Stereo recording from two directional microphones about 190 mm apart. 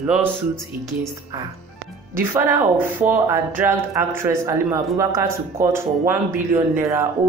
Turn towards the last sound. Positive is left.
turn(degrees=-15)  # may be behind; listen again after turning